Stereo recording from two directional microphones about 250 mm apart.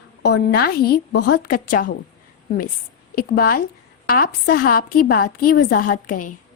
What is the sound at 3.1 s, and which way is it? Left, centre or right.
A woman's voice, left.